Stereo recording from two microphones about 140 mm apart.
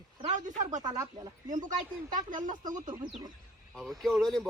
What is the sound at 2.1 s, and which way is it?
Speech, 70° right (ahead or behind).